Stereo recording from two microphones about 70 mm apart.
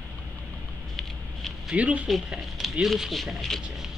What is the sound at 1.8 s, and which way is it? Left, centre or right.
Speech, centre.